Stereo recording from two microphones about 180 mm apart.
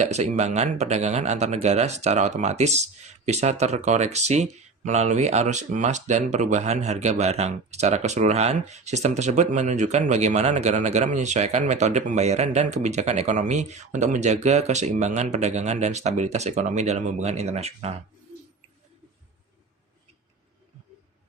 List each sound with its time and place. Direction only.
0.0 s speech: 40° right (ahead or behind)